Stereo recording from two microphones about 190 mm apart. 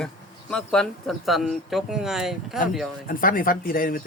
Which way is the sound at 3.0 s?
45° left (ahead or behind).